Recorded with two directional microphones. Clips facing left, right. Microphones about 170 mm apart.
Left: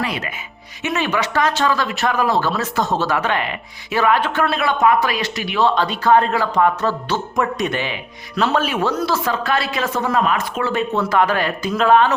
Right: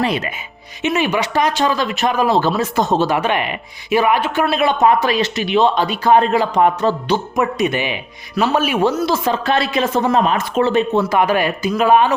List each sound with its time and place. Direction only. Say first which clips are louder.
0.8 s speech: right 3 dB; 15° right (ahead or behind)
7.3 s speech: even; 10° right (ahead or behind)
11.0 s speech: right 2 dB; 10° right (ahead or behind)